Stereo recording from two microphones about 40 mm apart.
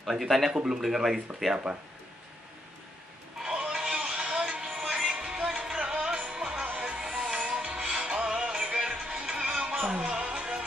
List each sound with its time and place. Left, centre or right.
0.1 s speech: centre
3.4 s music: right